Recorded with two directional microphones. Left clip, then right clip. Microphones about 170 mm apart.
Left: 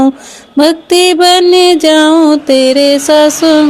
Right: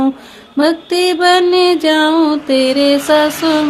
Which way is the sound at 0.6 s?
45° left (ahead or behind).